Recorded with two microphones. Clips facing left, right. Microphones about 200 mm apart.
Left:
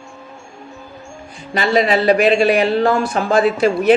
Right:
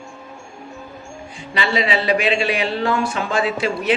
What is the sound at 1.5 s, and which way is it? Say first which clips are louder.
A woman's voice: left 5 dB; 45° left (ahead or behind).